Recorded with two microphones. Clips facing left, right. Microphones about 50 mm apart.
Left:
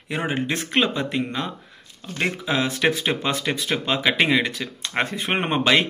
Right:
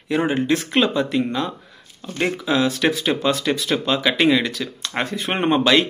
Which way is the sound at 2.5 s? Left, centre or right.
Left.